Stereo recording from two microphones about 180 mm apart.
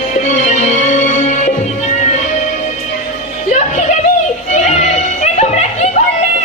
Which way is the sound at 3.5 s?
40° left (ahead or behind).